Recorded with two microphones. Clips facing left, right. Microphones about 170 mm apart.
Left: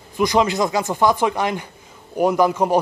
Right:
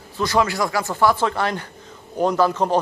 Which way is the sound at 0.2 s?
15° left (ahead or behind).